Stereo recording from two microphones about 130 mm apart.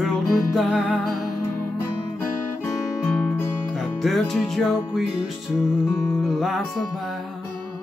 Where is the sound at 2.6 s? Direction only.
25° left (ahead or behind).